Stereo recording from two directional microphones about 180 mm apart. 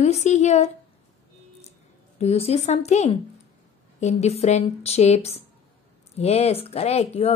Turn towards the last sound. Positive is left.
turn(degrees=35)  # may be behind; listen again after turning